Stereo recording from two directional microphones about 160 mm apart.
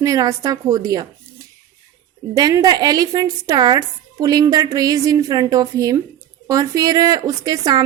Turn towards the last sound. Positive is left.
turn(degrees=-25)  # may be behind; listen again after turning